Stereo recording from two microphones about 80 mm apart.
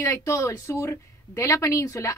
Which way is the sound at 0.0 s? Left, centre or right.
Left.